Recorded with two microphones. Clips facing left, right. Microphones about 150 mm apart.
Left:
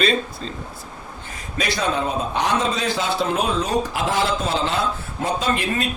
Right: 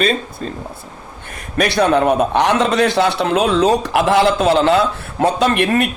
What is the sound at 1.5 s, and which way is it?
A man's voice, 65° right (ahead or behind).